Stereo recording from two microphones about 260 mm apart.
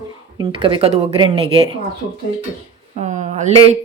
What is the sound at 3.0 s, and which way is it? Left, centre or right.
Speech, right.